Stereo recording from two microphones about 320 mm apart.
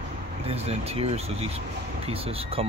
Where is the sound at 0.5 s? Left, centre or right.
Centre.